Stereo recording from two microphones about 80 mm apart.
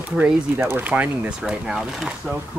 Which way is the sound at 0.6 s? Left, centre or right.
Right.